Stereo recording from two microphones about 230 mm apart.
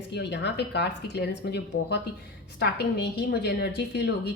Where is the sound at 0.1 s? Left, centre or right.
Left.